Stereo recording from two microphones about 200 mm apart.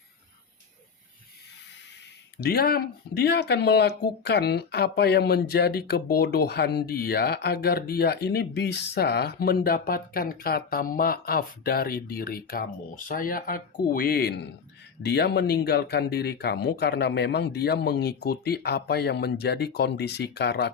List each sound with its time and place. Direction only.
2.4 s speech: 50° left (ahead or behind)